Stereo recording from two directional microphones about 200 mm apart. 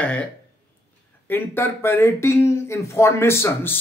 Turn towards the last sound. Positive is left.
turn(degrees=10)  # may be behind; listen again after turning